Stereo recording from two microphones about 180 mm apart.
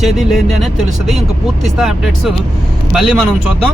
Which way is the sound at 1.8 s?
Centre (ahead or behind).